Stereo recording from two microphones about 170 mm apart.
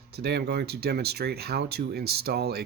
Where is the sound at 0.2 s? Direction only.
75° right (ahead or behind).